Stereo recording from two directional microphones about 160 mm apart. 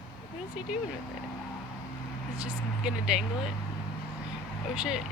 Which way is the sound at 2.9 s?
5° right (ahead or behind).